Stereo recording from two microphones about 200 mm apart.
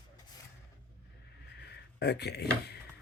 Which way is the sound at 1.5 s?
55° left (ahead or behind).